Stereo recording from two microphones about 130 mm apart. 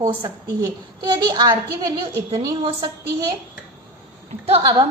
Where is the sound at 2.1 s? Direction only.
20° right (ahead or behind).